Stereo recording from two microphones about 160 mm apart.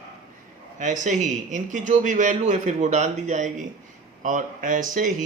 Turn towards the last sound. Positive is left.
turn(degrees=-55)  # may be behind; listen again after turning